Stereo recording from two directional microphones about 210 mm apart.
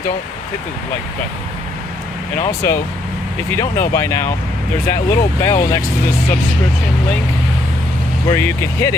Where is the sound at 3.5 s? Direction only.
15° left (ahead or behind).